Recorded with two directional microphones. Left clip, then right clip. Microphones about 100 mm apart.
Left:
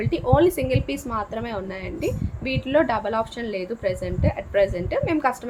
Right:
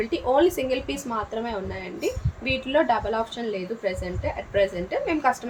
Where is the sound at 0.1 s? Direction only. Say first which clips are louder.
Left 3 dB; 25° left (ahead or behind).